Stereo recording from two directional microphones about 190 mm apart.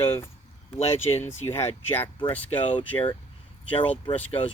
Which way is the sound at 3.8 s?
30° left (ahead or behind).